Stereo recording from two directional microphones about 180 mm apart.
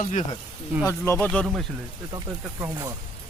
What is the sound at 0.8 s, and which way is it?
Speech, 15° left (ahead or behind).